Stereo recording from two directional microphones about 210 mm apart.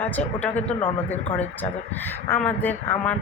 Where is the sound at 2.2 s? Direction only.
10° left (ahead or behind).